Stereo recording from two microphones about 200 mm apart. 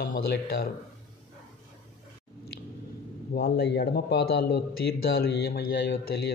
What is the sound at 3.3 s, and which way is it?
A man's voice, 50° left (ahead or behind).